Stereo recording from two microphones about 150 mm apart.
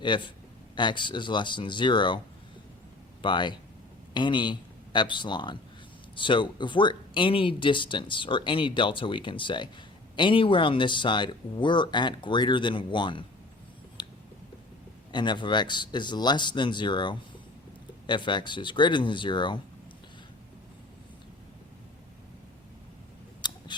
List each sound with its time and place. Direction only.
0.0 s speech: 30° left (ahead or behind)
14.0 s a sound: 30° left (ahead or behind)
15.1 s speech: 30° left (ahead or behind)
23.4 s scissors: 30° left (ahead or behind)